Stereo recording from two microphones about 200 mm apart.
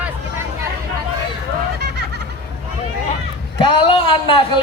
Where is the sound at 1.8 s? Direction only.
55° right (ahead or behind).